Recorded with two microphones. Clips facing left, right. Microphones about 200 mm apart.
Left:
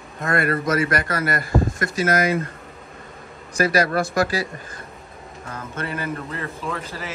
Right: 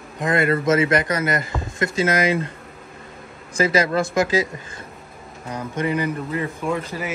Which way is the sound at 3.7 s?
20° right (ahead or behind).